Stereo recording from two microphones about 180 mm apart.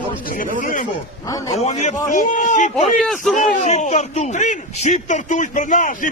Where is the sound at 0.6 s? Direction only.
45° left (ahead or behind).